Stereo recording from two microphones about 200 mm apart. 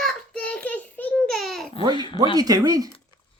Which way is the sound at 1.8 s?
20° right (ahead or behind).